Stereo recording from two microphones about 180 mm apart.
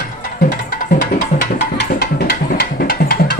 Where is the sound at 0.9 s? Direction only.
55° left (ahead or behind).